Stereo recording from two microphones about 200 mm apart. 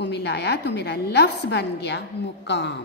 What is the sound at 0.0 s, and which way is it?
A woman's voice, 55° left (ahead or behind).